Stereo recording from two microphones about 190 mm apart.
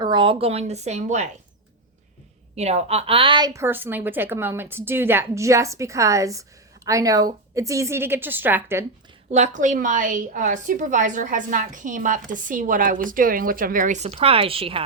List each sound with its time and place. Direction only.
0.0 s a woman's voice: 25° right (ahead or behind)
2.6 s a woman's voice: 35° right (ahead or behind); by 8.8 s 10° right (ahead or behind)
9.3 s a woman's voice: 40° right (ahead or behind)